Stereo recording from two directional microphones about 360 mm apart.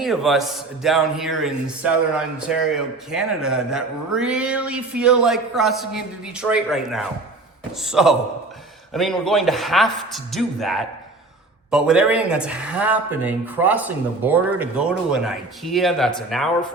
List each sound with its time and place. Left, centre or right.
0.0 s speech: centre